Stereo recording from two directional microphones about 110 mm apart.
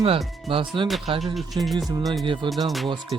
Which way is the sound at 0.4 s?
50° right (ahead or behind).